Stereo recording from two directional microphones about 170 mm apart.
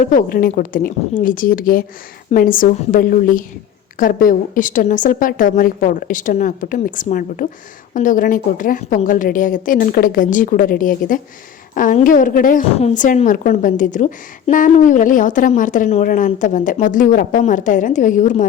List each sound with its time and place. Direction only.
0.0 s a woman's voice: 55° left (ahead or behind)
12.7 s a woman's voice: 45° left (ahead or behind)